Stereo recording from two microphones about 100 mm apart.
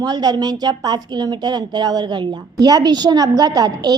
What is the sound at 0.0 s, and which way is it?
A woman's voice, 40° right (ahead or behind).